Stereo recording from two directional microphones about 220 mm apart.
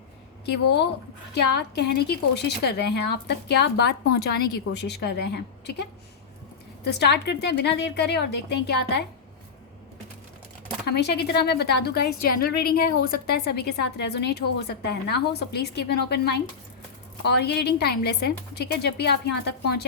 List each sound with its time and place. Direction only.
0.5 s a woman's voice: 50° left (ahead or behind)
7.0 s a woman's voice: 50° left (ahead or behind)
10.9 s a woman's voice: 50° left (ahead or behind)